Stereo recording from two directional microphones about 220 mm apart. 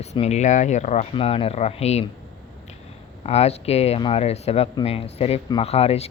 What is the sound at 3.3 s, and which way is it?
Speech, 30° left (ahead or behind).